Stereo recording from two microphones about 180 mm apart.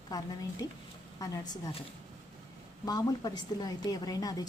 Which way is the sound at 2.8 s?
20° left (ahead or behind).